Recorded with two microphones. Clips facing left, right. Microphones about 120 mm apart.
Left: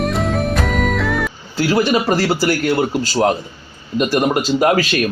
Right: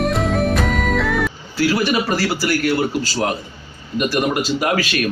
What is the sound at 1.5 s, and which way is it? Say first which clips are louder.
A man's voice: left 2 dB; 25° left (ahead or behind).